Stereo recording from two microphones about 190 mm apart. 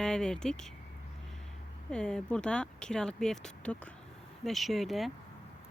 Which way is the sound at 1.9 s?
5° left (ahead or behind).